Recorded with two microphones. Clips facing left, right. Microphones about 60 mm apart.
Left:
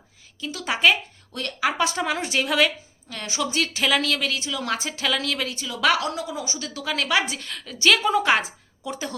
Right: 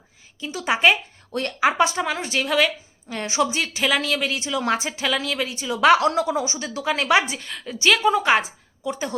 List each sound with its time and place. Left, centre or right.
0.4 s a woman's voice: centre
1.9 s a woman's voice: centre
3.1 s a woman's voice: right
3.5 s speech: centre
5.7 s a woman's voice: right
6.1 s speech: right
6.4 s a woman's voice: right
7.3 s a woman's voice: centre